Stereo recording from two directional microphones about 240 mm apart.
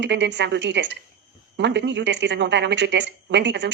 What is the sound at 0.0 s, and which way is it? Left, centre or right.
Speech, right.